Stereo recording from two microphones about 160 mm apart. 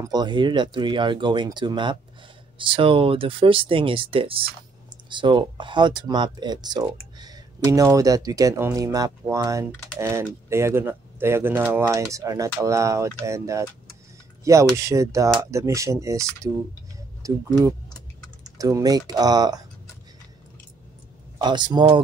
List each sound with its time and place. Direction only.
0.0 s speech: 25° right (ahead or behind)
21.4 s speech: 30° right (ahead or behind)